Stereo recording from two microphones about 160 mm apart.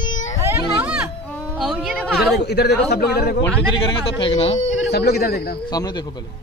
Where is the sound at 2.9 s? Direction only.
80° left.